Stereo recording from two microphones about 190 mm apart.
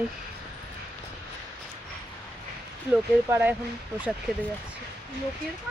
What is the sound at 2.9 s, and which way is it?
Speech, 10° right (ahead or behind).